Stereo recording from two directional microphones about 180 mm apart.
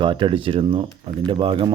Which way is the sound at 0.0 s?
25° right (ahead or behind).